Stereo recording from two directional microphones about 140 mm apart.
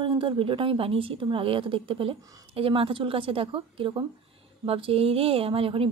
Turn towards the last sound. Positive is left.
turn(degrees=-40)  # may be behind; listen again after turning